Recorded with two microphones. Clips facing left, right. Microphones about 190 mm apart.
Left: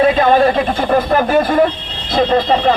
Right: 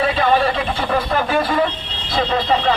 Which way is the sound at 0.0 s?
45° left (ahead or behind).